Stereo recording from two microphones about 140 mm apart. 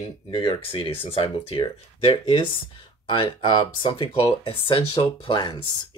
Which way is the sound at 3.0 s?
35° left (ahead or behind).